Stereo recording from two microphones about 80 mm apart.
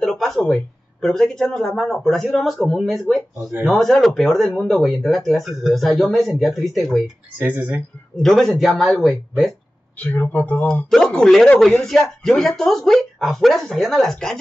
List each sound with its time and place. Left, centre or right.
0.0 s speech: centre
7.3 s speech: centre
8.2 s speech: centre
9.9 s speech: left
10.9 s speech: centre